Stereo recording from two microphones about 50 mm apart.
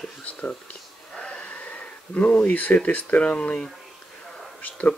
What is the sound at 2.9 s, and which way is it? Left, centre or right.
Speech, left.